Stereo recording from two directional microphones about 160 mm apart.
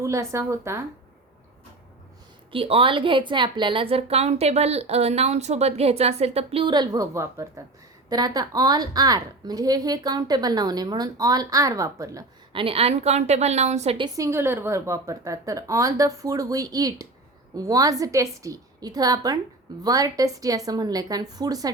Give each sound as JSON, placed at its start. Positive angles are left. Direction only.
{"t": 0.0, "sound": "a woman's voice", "side_deg": -20}
{"t": 2.5, "sound": "a woman's voice", "side_deg": -35}
{"t": 12.5, "sound": "a woman's voice", "side_deg": -35}
{"t": 14.0, "sound": "a woman's voice", "side_deg": -20}